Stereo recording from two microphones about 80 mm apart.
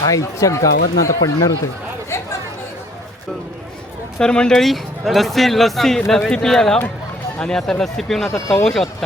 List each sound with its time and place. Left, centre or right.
0.0 s speech: left
4.2 s speech: centre